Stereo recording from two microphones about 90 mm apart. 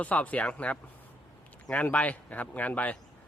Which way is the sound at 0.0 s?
15° left (ahead or behind).